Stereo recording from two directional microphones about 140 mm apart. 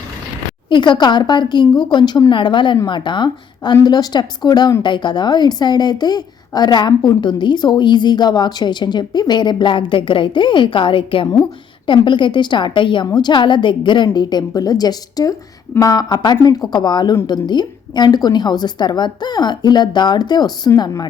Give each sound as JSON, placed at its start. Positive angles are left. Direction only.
{"t": 0.7, "sound": "a woman's voice", "side_deg": 35}